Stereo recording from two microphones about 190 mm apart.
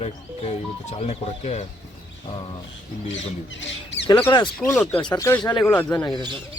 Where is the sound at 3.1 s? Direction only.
75° left (ahead or behind).